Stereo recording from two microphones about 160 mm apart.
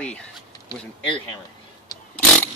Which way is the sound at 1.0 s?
35° left (ahead or behind).